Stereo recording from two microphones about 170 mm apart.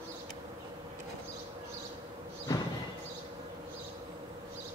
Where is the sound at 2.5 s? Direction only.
20° left (ahead or behind).